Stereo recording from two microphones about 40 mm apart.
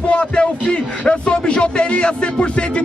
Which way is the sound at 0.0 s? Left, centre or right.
Left.